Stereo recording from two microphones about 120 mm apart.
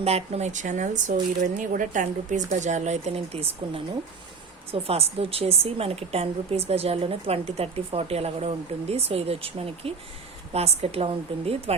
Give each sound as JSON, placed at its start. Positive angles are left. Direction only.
{"t": 0.0, "sound": "a woman's voice", "side_deg": -60}